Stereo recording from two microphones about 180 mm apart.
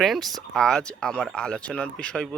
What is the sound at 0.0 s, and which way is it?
Speech, centre (ahead or behind).